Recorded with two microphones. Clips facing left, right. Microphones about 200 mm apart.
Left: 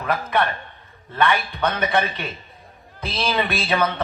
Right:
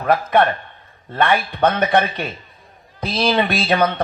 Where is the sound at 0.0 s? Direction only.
50° right (ahead or behind).